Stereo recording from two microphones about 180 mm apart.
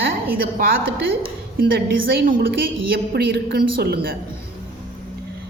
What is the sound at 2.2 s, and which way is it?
A woman's voice, 55° right (ahead or behind).